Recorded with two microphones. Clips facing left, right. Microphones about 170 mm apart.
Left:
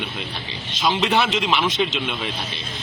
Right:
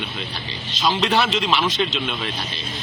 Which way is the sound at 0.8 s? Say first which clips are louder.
Even; centre (ahead or behind).